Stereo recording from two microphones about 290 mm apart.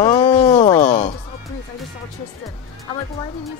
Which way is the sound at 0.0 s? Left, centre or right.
Centre.